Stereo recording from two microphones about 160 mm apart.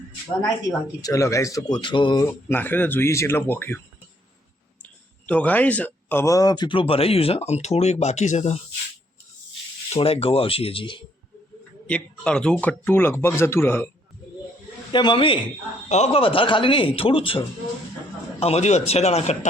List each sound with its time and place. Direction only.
1.0 s speech: 20° left (ahead or behind)
2.2 s speech: 15° left (ahead or behind)
4.8 s speech: 10° left (ahead or behind); by 8.6 s 45° left (ahead or behind)
9.9 s speech: 40° left (ahead or behind)
11.9 s speech: 5° left (ahead or behind)
14.9 s a man's voice: 30° left (ahead or behind)